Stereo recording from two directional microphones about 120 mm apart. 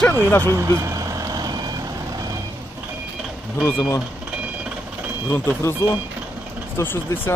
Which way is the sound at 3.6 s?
25° left (ahead or behind).